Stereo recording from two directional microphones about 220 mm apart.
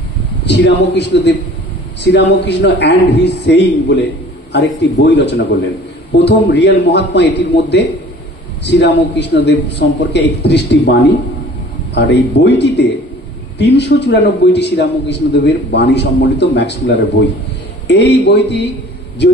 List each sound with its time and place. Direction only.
0.5 s a man's voice: 50° left (ahead or behind)